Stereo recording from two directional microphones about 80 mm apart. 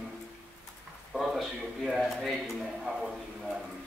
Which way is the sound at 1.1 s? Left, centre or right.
Centre.